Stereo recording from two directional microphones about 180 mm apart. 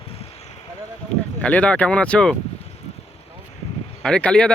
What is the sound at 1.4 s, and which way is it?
Speech, 5° left (ahead or behind).